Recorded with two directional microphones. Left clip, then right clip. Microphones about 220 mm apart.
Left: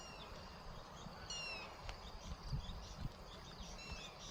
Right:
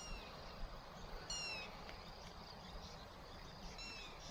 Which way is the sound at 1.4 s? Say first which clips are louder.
Even; 25° right (ahead or behind).